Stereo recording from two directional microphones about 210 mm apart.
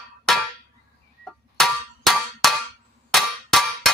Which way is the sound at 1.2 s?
Centre (ahead or behind).